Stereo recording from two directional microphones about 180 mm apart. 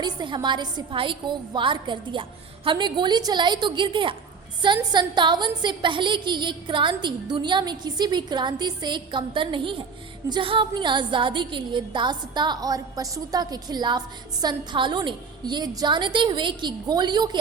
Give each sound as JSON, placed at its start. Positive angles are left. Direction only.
{"t": 0.0, "sound": "a woman's voice", "side_deg": -25}